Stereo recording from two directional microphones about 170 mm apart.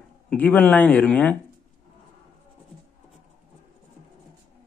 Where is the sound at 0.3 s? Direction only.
10° left (ahead or behind).